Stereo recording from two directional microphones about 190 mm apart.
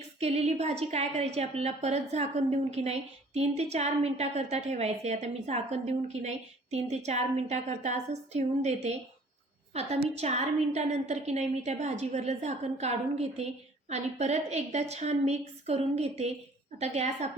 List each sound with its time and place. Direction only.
0.2 s a woman's voice: 35° right (ahead or behind)